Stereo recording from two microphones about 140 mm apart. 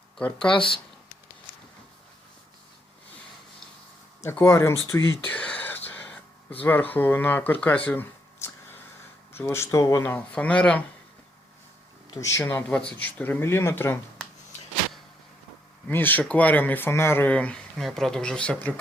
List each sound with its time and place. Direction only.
0.2 s speech: 5° left (ahead or behind)
0.5 s speech: 35° left (ahead or behind)
4.2 s speech: 20° left (ahead or behind)
5.3 s whispering: 10° left (ahead or behind)
6.6 s speech: 15° left (ahead or behind)
7.9 s a sound: 15° left (ahead or behind)
9.4 s speech: 20° left (ahead or behind)
12.2 s speech: 20° left (ahead or behind)
15.9 s speech: 15° left (ahead or behind)